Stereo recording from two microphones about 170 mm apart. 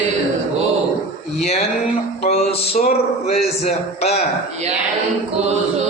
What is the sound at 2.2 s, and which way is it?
Music, 40° left (ahead or behind).